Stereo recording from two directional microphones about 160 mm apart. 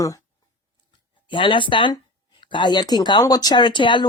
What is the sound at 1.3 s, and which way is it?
Speech, 30° left (ahead or behind).